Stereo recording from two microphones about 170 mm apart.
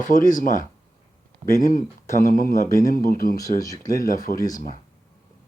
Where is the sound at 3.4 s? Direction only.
20° left (ahead or behind).